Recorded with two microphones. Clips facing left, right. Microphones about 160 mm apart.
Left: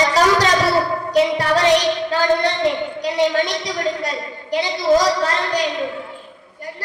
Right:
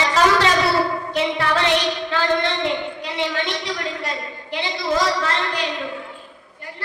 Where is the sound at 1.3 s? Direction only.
40° left (ahead or behind).